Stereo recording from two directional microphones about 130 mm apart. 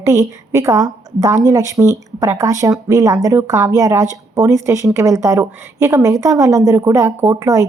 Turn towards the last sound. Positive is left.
turn(degrees=-25)  # may be behind; listen again after turning